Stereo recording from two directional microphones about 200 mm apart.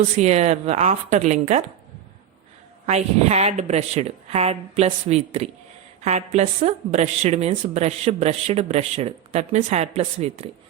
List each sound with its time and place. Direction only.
0.2 s a woman's voice: 35° right (ahead or behind)
2.8 s a woman's voice: 35° right (ahead or behind)